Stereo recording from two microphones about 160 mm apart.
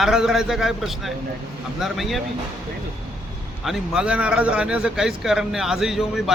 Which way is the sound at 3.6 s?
5° right (ahead or behind).